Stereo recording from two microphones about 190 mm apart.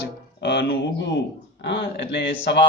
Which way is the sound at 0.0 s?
65° left (ahead or behind).